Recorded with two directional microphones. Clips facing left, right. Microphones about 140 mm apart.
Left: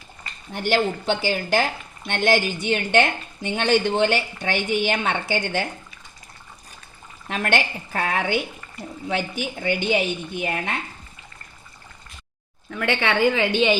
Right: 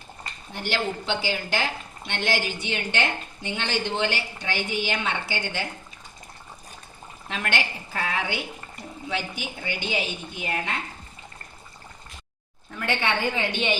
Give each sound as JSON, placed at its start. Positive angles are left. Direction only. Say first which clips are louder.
{"t": 0.5, "sound": "a woman's voice", "louder": "left 6 dB", "side_deg": 45}
{"t": 7.3, "sound": "a woman's voice", "louder": "left 5 dB", "side_deg": 50}
{"t": 12.7, "sound": "a woman's voice", "louder": "left 4 dB", "side_deg": 90}